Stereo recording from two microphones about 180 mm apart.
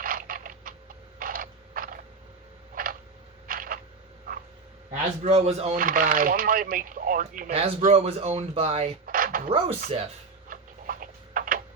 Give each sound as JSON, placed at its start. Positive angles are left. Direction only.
{"t": 0.0, "sound": "mechanisms", "side_deg": -50}
{"t": 1.2, "sound": "a sound", "side_deg": -50}
{"t": 2.7, "sound": "tick-tock", "side_deg": -50}
{"t": 3.4, "sound": "a sound", "side_deg": -50}
{"t": 5.2, "sound": "speech", "side_deg": -35}
{"t": 5.8, "sound": "speech", "side_deg": -50}
{"t": 7.5, "sound": "speech", "side_deg": -30}
{"t": 9.0, "sound": "a sound", "side_deg": -50}
{"t": 9.5, "sound": "speech", "side_deg": -30}
{"t": 10.5, "sound": "tick-tock", "side_deg": -50}